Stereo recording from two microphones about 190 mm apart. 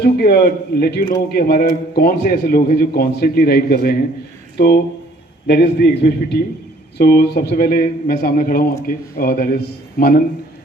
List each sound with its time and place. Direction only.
0.0 s a man's voice: 55° left (ahead or behind)